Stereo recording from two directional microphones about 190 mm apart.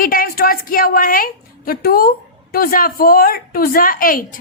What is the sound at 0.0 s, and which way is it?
A woman's voice, 50° left (ahead or behind).